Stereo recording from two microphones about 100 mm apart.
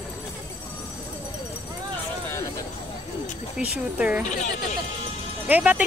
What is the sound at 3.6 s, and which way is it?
Speech, 15° right (ahead or behind).